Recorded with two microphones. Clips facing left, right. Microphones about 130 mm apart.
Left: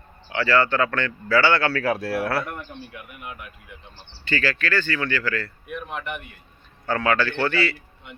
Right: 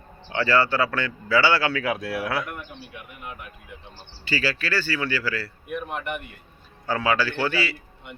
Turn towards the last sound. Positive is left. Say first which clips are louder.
# left 2 dB
turn(degrees=-5)  # may be behind; listen again after turning